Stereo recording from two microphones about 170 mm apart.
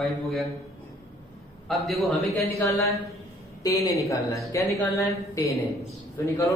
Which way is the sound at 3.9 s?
20° left (ahead or behind).